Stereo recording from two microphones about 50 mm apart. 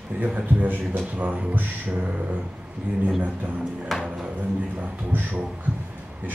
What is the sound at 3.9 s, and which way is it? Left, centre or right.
Speech, centre.